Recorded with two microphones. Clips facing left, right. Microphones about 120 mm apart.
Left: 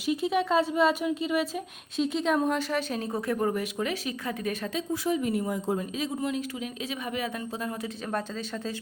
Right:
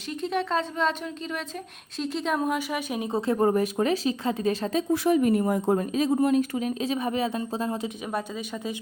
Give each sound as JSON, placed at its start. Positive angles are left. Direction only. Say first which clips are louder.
{"t": 0.1, "sound": "speech", "louder": "left 2 dB", "side_deg": 5}
{"t": 3.1, "sound": "speech", "louder": "right 7 dB", "side_deg": -25}
{"t": 4.9, "sound": "speech", "louder": "right 6 dB", "side_deg": -55}